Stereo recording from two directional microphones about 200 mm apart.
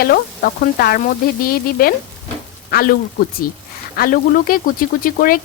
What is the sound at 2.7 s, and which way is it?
Speech, 45° left (ahead or behind).